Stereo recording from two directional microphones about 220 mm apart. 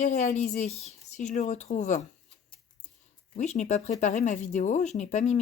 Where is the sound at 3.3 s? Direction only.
30° left (ahead or behind).